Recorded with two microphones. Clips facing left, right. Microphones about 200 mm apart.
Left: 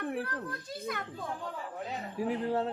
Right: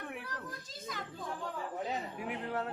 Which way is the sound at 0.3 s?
60° left (ahead or behind).